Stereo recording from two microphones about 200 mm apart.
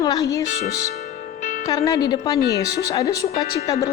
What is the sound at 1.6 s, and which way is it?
A woman's voice, 20° left (ahead or behind).